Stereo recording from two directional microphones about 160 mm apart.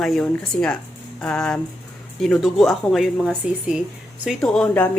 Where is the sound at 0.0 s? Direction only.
Centre (ahead or behind).